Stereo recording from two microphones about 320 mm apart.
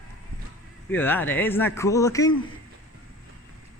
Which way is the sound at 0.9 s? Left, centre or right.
Centre.